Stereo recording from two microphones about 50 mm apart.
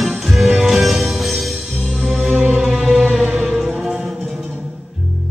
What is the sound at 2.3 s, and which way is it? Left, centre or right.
Music, right.